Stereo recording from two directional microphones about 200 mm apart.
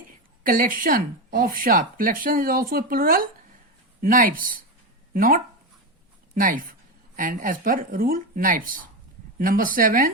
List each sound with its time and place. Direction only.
0.4 s speech: 45° right (ahead or behind)